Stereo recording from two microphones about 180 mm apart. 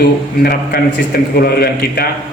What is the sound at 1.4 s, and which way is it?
Speech, 60° left (ahead or behind).